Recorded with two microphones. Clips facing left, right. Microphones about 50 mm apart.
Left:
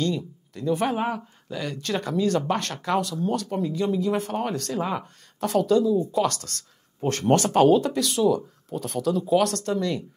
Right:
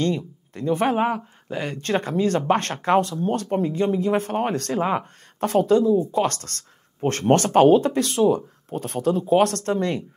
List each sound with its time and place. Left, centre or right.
0.0 s speech: right
0.9 s speech: right
1.5 s speech: right